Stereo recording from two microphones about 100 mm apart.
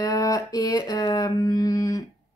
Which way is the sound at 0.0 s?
40° left (ahead or behind).